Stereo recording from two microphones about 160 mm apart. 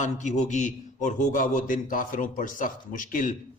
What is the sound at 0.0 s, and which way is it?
A man's voice, 50° left (ahead or behind).